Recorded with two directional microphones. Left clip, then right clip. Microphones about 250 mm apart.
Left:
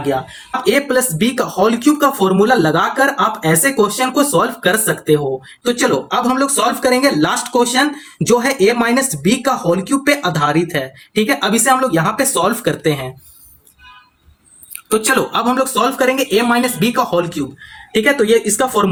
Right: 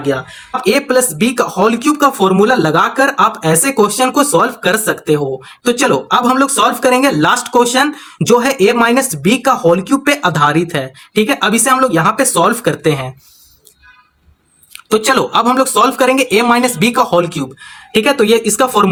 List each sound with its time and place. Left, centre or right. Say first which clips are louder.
0.7 s speech: right 2 dB; right
14.8 s speech: right 3 dB; right